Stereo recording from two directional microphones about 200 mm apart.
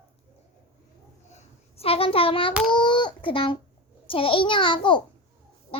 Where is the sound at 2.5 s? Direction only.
Centre (ahead or behind).